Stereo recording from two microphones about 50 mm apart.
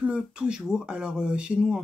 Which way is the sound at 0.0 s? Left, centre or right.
Right.